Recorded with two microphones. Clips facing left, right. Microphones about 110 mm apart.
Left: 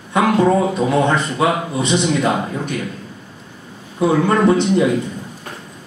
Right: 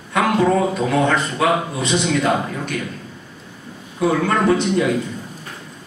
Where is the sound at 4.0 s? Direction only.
20° left (ahead or behind).